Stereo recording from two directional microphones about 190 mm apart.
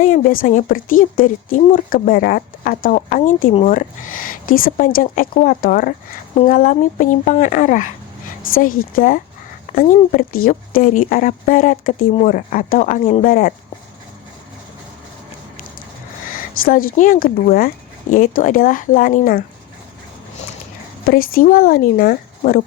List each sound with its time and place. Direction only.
0.0 s speech: 45° left (ahead or behind)
16.2 s speech: 45° left (ahead or behind)
21.0 s speech: 50° left (ahead or behind)